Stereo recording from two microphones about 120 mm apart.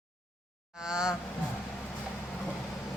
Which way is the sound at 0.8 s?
5° right (ahead or behind).